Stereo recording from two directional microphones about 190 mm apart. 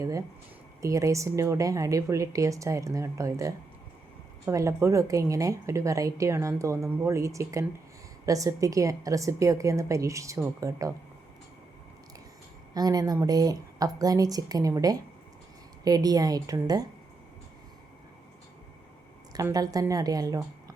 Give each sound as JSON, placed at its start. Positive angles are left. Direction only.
{"t": 0.0, "sound": "a woman's voice", "side_deg": -15}
{"t": 12.7, "sound": "a woman's voice", "side_deg": -20}
{"t": 19.3, "sound": "a woman's voice", "side_deg": -20}